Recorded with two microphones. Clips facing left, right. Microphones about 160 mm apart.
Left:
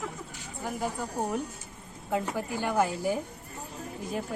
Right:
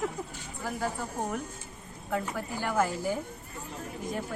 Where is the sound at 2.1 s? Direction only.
20° left (ahead or behind).